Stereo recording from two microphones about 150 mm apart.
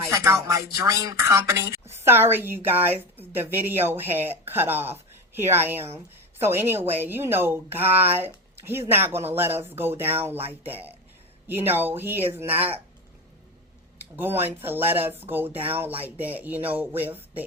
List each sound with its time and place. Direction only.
0.1 s a woman's voice: 20° right (ahead or behind)
11.4 s a woman's voice: 15° right (ahead or behind)
12.5 s speech: 40° right (ahead or behind)
14.2 s a woman's voice: 15° right (ahead or behind)